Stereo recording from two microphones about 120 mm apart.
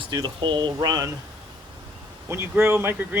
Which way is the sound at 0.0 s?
40° right (ahead or behind).